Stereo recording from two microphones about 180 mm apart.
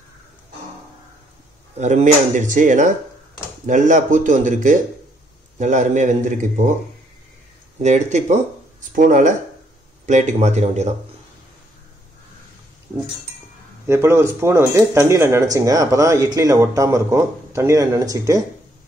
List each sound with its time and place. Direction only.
1.8 s speech: 40° right (ahead or behind)
7.8 s speech: 40° right (ahead or behind)
13.8 s speech: 15° right (ahead or behind)